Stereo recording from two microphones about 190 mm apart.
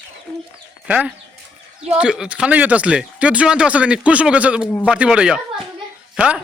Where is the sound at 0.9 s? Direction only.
5° right (ahead or behind).